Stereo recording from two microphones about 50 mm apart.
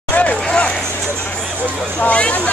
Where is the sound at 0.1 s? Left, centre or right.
Left.